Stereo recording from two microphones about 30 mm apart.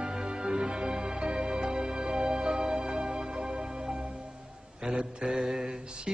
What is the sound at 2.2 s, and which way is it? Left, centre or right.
Music, right.